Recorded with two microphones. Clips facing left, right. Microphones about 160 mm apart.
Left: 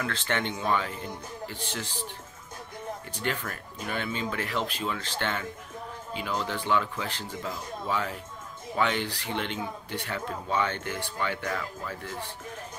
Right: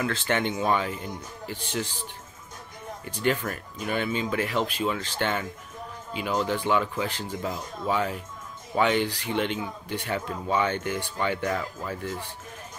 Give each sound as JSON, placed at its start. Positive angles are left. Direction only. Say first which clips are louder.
{"t": 0.0, "sound": "speech", "louder": "right 4 dB", "side_deg": -10}
{"t": 3.3, "sound": "speech", "louder": "right 7 dB", "side_deg": -15}
{"t": 8.7, "sound": "speech", "louder": "right 4 dB", "side_deg": -15}
{"t": 11.1, "sound": "speech", "louder": "right 4 dB", "side_deg": -25}